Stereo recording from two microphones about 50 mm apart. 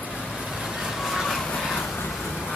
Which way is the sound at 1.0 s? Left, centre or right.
Centre.